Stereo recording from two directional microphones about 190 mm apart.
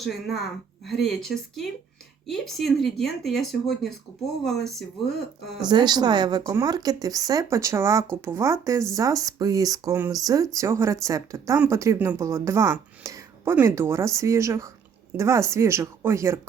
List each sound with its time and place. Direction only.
0.0 s speech: centre (ahead or behind)
5.6 s speech: 25° right (ahead or behind)